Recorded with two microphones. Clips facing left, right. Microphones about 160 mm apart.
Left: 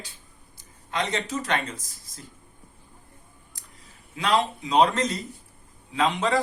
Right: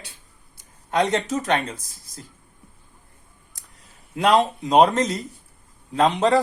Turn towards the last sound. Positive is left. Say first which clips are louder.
# right 5 dB
turn(degrees=-40)  # may be behind; listen again after turning